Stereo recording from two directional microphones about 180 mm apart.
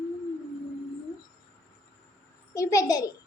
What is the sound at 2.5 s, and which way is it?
Speech, 15° left (ahead or behind).